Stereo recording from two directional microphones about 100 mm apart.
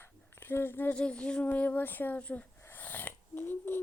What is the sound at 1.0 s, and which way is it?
Speech, 10° left (ahead or behind).